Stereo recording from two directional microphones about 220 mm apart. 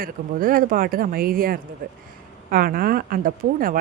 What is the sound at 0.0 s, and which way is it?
Speech, 40° right (ahead or behind).